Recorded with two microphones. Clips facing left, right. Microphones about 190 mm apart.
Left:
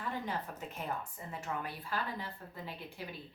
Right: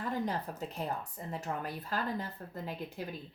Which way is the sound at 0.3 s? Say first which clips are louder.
Right 3 dB; 35° right (ahead or behind).